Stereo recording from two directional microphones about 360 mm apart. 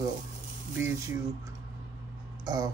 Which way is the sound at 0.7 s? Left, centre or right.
Centre.